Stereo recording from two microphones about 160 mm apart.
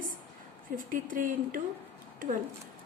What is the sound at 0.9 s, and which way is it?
Speech, 55° right (ahead or behind).